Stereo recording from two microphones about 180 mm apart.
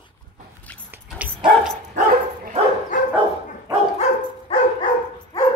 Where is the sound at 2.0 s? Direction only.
45° right (ahead or behind).